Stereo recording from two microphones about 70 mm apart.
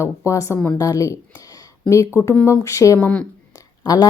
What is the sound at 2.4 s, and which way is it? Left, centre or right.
Speech, left.